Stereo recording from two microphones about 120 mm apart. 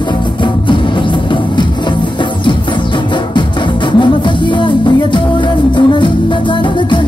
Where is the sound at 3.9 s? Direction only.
40° left (ahead or behind).